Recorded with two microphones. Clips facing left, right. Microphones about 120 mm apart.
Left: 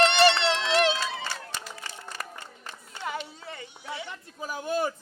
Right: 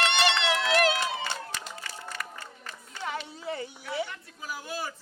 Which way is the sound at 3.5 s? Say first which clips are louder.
Right 7 dB; 35° right (ahead or behind).